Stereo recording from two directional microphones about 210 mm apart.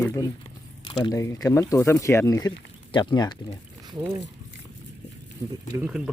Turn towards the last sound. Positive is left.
turn(degrees=-5)  # may be behind; listen again after turning